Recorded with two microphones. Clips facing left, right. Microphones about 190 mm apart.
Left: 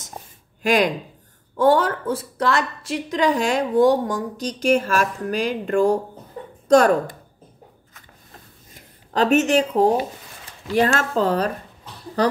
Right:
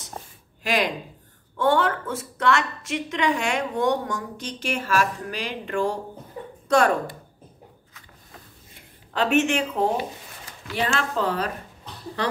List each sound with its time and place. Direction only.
0.2 s a sound: 5° left (ahead or behind)
0.6 s a woman's voice: 45° left (ahead or behind)
8.7 s a woman's voice: 40° left (ahead or behind)